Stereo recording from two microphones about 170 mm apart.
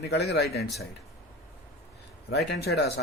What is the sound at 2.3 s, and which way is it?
Speech, 75° left (ahead or behind).